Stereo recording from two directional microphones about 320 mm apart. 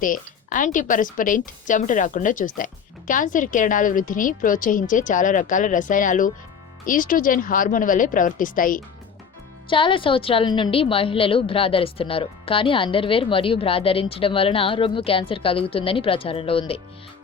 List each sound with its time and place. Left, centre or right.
0.0 s a woman's voice: left